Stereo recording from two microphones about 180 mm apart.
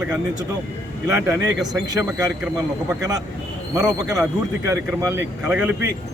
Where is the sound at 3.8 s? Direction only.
20° right (ahead or behind).